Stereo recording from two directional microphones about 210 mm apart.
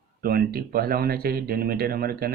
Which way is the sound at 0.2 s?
45° right (ahead or behind).